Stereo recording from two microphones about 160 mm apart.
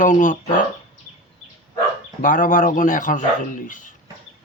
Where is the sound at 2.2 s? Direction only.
55° left (ahead or behind).